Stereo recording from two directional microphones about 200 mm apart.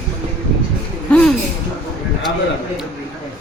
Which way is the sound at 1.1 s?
Centre (ahead or behind).